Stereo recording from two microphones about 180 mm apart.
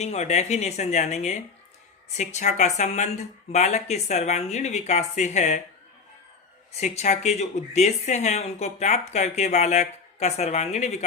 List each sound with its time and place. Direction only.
0.0 s speech: 40° left (ahead or behind)
6.7 s speech: 35° left (ahead or behind)